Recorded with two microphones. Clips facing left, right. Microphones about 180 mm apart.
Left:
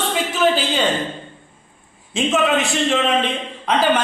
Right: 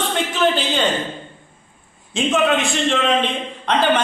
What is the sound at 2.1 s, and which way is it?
Speech, centre (ahead or behind).